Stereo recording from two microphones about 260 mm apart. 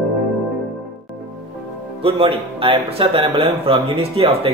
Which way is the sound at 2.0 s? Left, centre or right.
Right.